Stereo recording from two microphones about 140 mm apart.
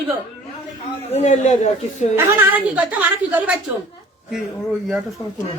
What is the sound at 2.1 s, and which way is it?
A woman's voice, 15° right (ahead or behind).